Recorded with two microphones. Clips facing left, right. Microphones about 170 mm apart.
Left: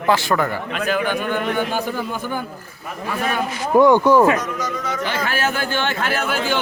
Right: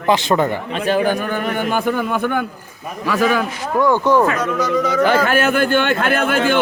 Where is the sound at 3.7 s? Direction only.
20° left (ahead or behind).